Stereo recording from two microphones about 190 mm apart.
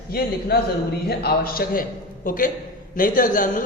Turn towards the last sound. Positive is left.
turn(degrees=45)  # may be behind; listen again after turning